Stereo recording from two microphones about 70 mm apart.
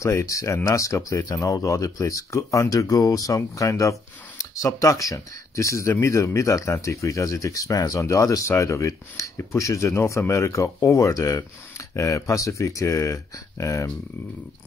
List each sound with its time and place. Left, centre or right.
0.0 s speech: left